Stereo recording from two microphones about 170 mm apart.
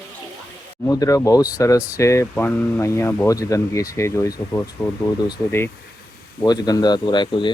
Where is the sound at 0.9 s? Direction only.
20° left (ahead or behind).